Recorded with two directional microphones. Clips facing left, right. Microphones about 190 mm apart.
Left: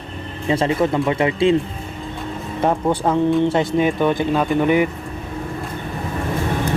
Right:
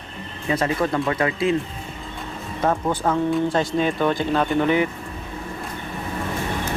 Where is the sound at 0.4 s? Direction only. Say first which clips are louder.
Left 4 dB; 25° left (ahead or behind).